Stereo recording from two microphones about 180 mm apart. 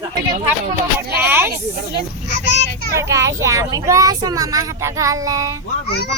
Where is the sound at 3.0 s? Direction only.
15° right (ahead or behind).